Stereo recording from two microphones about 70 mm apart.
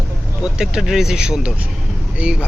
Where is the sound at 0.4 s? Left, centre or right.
Centre.